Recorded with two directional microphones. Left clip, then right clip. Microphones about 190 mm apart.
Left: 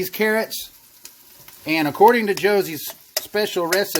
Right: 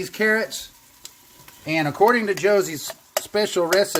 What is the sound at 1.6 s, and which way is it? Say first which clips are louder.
Speech: left 4 dB; 35° left (ahead or behind).